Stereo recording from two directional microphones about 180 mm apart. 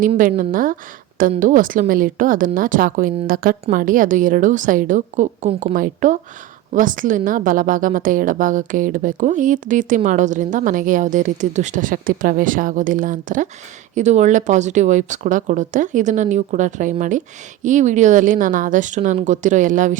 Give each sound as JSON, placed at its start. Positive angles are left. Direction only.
{"t": 0.2, "sound": "a woman's voice", "side_deg": -50}
{"t": 5.7, "sound": "a woman's voice", "side_deg": -45}